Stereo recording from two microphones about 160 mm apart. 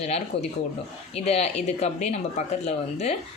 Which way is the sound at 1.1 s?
40° left (ahead or behind).